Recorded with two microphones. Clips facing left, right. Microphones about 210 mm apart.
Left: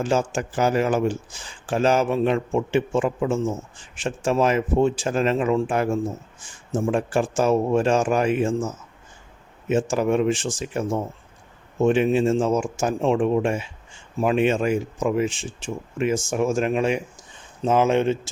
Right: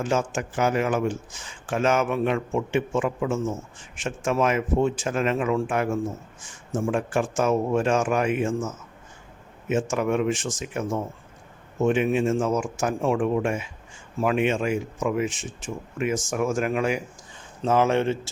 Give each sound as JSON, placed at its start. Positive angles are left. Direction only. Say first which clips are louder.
{"t": 0.0, "sound": "speech", "louder": "left 2 dB", "side_deg": 30}
{"t": 14.4, "sound": "speech", "louder": "left 3 dB", "side_deg": 40}